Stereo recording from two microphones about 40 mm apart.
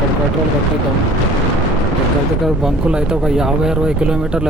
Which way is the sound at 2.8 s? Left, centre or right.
Right.